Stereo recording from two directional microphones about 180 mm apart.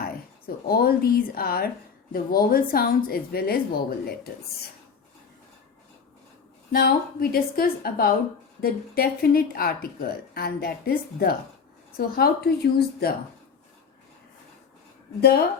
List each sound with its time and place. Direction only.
0.0 s speech: 55° left (ahead or behind)
6.7 s speech: 60° left (ahead or behind)
15.2 s speech: 65° left (ahead or behind)